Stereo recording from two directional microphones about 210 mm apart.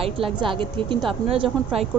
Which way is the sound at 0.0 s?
25° right (ahead or behind).